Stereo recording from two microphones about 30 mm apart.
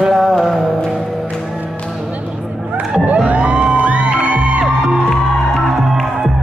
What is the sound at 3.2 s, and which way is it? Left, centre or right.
Music, right.